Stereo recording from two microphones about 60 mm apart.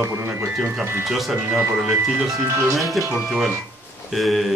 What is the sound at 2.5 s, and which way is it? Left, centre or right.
Speech, right.